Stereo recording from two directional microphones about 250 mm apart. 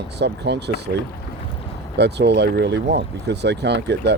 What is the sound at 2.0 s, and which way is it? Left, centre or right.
Speech, right.